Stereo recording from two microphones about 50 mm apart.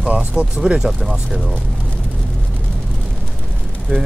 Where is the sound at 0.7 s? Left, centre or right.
Centre.